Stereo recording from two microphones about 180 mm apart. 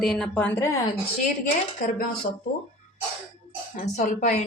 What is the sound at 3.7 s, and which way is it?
Speech, 40° left (ahead or behind).